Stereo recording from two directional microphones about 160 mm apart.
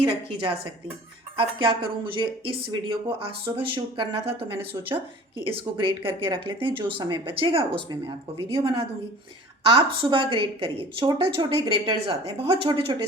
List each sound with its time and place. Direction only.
0.0 s speech: 35° right (ahead or behind)